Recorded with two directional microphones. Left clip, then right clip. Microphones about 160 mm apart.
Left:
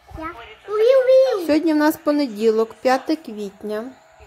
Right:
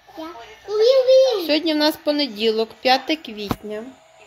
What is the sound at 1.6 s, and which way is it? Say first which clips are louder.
A woman's voice: left 1 dB; 55° left (ahead or behind).